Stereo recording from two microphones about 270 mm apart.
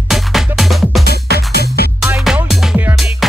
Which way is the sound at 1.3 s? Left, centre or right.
Right.